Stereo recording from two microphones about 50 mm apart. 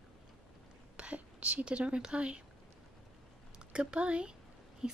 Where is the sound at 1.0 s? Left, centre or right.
Right.